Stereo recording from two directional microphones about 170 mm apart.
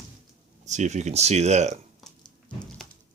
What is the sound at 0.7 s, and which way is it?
Speech, 45° right (ahead or behind).